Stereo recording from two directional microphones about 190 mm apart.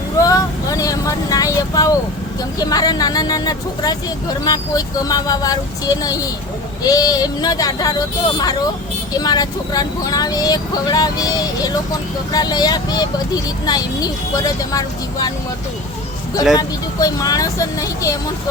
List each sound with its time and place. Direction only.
0.2 s vehicle: 20° left (ahead or behind)
2.6 s speech: 20° left (ahead or behind)
16.6 s speech: 20° left (ahead or behind)